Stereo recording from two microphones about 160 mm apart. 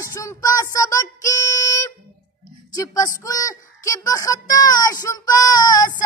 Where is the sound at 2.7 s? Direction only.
20° left (ahead or behind).